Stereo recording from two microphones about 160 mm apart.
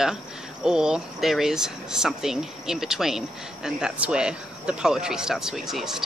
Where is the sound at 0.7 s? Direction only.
5° right (ahead or behind).